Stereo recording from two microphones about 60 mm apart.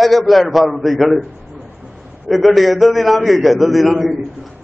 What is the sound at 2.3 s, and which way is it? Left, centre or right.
A man's voice, centre.